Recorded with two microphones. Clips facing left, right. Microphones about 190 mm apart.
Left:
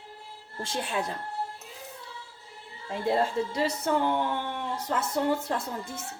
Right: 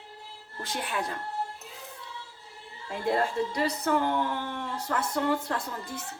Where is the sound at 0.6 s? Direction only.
30° left (ahead or behind).